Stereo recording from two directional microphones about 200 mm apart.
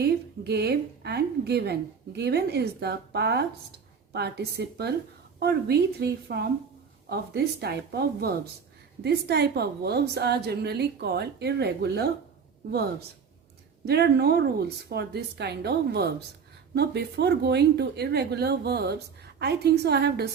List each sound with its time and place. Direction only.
0.0 s a woman's voice: 55° right (ahead or behind)
13.8 s a woman's voice: 55° right (ahead or behind)